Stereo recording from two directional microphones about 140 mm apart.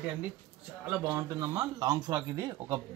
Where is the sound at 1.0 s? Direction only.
20° right (ahead or behind).